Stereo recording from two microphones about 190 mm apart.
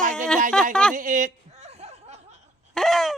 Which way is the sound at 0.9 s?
45° right (ahead or behind).